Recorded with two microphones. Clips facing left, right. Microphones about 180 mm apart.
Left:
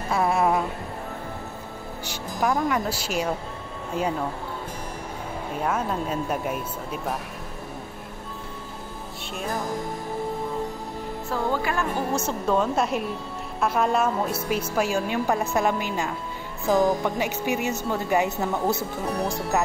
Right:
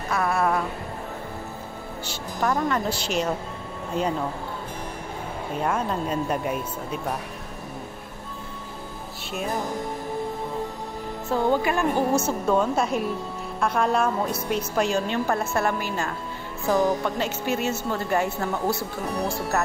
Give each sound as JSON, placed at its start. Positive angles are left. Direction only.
{"t": 0.1, "sound": "a woman's voice", "side_deg": 20}
{"t": 2.0, "sound": "speech", "side_deg": 10}
{"t": 5.6, "sound": "speech", "side_deg": 5}
{"t": 11.2, "sound": "speech", "side_deg": -20}
{"t": 12.3, "sound": "speech", "side_deg": 0}